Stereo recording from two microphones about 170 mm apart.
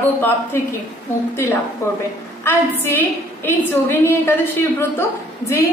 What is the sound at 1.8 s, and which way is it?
A woman's voice, 15° left (ahead or behind).